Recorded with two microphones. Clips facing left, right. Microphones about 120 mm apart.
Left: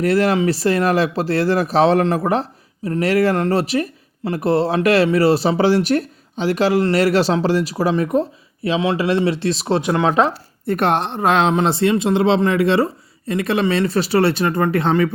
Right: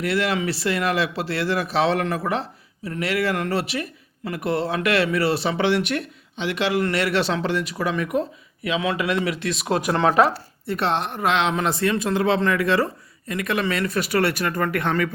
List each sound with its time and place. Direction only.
0.0 s speech: 40° left (ahead or behind)
9.9 s speech: 15° left (ahead or behind)
10.7 s a woman's voice: 50° left (ahead or behind)
11.0 s speech: 30° left (ahead or behind)
11.5 s speech: 30° left (ahead or behind)